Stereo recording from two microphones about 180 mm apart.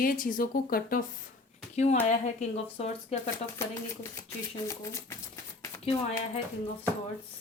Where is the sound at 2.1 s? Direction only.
40° left (ahead or behind).